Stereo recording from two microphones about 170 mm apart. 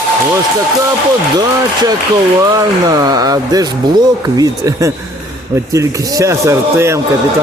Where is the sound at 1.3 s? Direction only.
25° right (ahead or behind).